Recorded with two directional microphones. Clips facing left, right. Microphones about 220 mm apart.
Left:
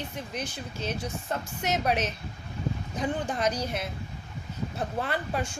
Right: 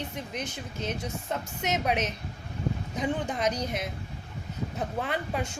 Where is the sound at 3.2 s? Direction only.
20° right (ahead or behind).